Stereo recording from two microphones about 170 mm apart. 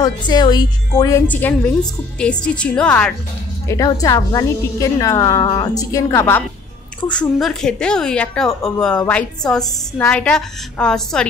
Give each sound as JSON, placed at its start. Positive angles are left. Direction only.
{"t": 0.0, "sound": "a woman's voice", "side_deg": 25}
{"t": 3.6, "sound": "a woman's voice", "side_deg": 20}
{"t": 7.1, "sound": "a woman's voice", "side_deg": 5}